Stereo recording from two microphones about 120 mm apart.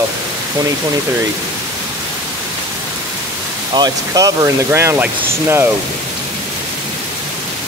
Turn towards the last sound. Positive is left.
turn(degrees=-20)  # may be behind; listen again after turning